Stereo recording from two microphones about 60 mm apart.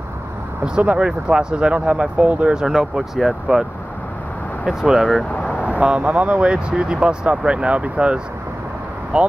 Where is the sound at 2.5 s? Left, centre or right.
Centre.